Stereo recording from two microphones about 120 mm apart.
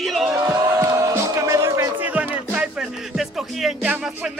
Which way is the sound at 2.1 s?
15° right (ahead or behind).